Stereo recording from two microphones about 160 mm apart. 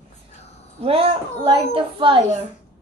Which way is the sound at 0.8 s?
35° right (ahead or behind).